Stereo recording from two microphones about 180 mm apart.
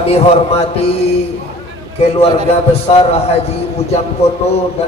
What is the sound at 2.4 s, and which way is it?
Mantra, 35° left (ahead or behind).